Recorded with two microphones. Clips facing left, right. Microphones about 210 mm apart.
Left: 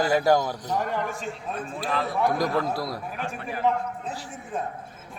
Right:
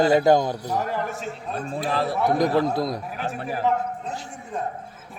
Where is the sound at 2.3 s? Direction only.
20° right (ahead or behind).